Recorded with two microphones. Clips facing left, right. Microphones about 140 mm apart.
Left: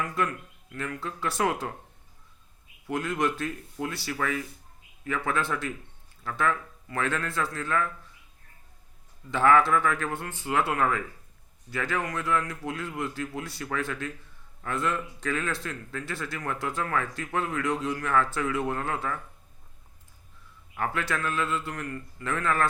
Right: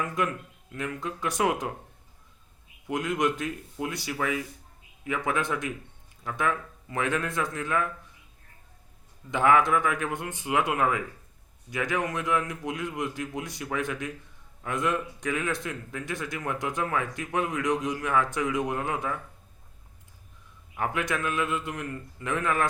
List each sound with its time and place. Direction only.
0.0 s a man's voice: 20° right (ahead or behind)
2.8 s a man's voice: 15° right (ahead or behind)
9.3 s a man's voice: 15° right (ahead or behind)
20.7 s a man's voice: 15° right (ahead or behind)